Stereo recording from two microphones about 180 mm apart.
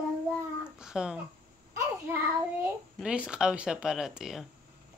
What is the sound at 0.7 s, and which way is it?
Babbling, 5° right (ahead or behind).